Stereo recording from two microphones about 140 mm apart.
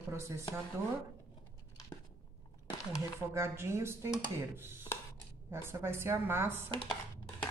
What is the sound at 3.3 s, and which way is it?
A woman's voice, 20° right (ahead or behind).